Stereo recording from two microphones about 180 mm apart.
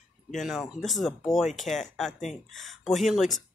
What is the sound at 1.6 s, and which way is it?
Speech, 40° left (ahead or behind).